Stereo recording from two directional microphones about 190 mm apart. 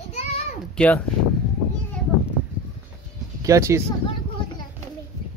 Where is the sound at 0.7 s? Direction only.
5° left (ahead or behind).